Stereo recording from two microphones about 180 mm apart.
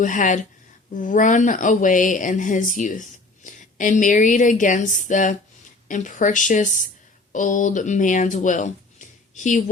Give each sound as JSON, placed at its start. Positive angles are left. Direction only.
{"t": 0.0, "sound": "speech", "side_deg": 45}